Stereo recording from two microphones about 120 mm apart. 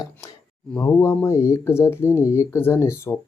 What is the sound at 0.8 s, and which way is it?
Speech, 20° left (ahead or behind).